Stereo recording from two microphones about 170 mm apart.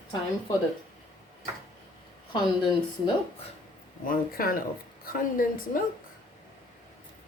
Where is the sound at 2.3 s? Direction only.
25° left (ahead or behind).